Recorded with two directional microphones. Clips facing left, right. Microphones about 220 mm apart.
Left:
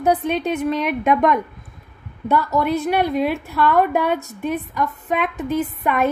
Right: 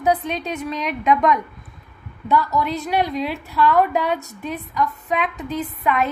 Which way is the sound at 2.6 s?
55° left (ahead or behind).